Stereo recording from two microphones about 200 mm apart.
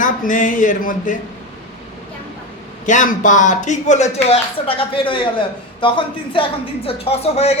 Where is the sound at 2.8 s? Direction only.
40° left (ahead or behind).